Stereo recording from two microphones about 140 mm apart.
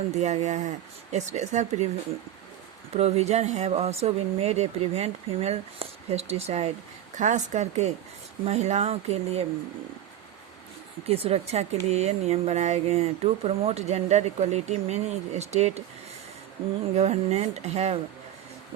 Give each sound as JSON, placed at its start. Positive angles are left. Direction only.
{"t": 0.1, "sound": "speech", "side_deg": -55}
{"t": 2.9, "sound": "speech", "side_deg": -50}
{"t": 7.2, "sound": "speech", "side_deg": -60}
{"t": 11.0, "sound": "speech", "side_deg": -45}
{"t": 16.9, "sound": "speech", "side_deg": -50}